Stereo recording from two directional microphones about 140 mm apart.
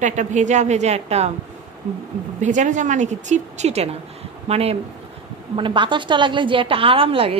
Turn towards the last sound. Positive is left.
turn(degrees=-40)  # may be behind; listen again after turning